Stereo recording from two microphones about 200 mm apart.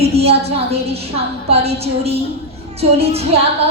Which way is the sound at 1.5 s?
30° right (ahead or behind).